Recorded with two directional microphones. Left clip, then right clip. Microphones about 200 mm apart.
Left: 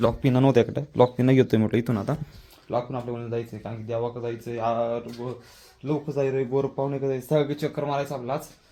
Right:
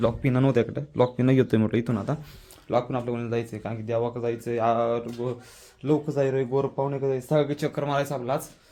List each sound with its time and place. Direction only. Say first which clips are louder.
0.0 s speech: left 2 dB; 10° left (ahead or behind)
2.6 s speech: right 3 dB; 25° right (ahead or behind)
6.1 s speech: left 3 dB; 10° right (ahead or behind)
6.5 s speech: even; 5° left (ahead or behind)
7.9 s speech: right 3 dB; 15° right (ahead or behind)